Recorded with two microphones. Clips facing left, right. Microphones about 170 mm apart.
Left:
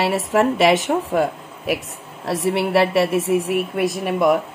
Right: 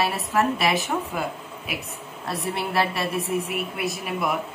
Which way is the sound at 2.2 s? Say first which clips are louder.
Left 8 dB; 90° left.